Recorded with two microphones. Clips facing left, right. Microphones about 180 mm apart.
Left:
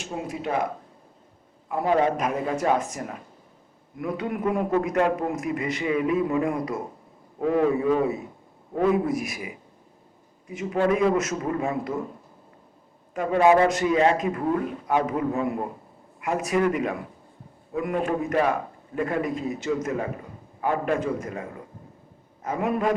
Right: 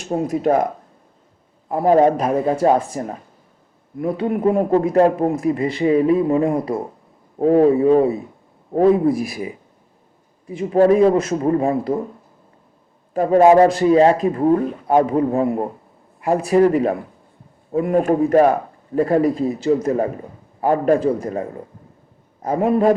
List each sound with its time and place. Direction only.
0.0 s speech: 40° right (ahead or behind)
1.7 s a man's voice: 40° right (ahead or behind)
13.1 s a man's voice: 35° right (ahead or behind)
22.4 s a man's voice: 35° right (ahead or behind)